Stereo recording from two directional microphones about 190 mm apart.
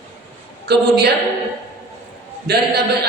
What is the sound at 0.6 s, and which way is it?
Speech, 60° right (ahead or behind).